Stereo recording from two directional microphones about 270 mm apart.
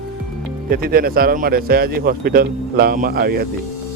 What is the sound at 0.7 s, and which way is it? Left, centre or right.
Speech, right.